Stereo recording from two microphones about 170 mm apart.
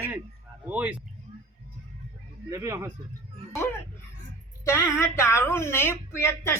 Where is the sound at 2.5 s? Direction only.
15° right (ahead or behind).